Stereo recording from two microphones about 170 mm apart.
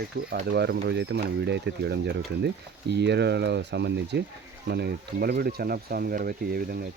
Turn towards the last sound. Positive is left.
turn(degrees=-60)  # may be behind; listen again after turning